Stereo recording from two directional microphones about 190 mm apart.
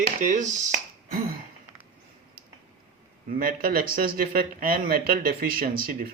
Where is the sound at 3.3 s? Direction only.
50° right (ahead or behind).